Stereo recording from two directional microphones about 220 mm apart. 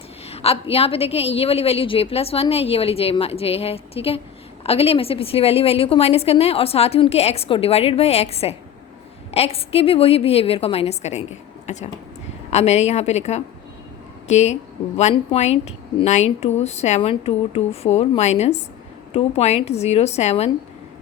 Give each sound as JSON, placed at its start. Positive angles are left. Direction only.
{"t": 0.3, "sound": "a woman's voice", "side_deg": 25}